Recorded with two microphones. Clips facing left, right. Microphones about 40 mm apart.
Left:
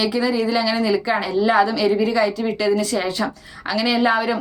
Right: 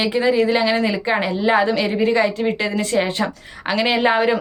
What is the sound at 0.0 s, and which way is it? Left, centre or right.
A woman's voice, right.